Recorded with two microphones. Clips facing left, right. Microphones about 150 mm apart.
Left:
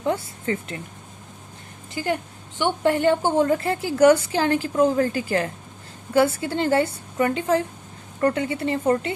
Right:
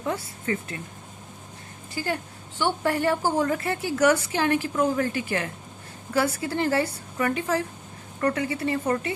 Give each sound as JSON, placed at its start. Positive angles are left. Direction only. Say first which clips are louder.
{"t": 0.0, "sound": "a woman's voice", "louder": "left 4 dB", "side_deg": 25}
{"t": 2.6, "sound": "a woman's voice", "louder": "left 4 dB", "side_deg": 20}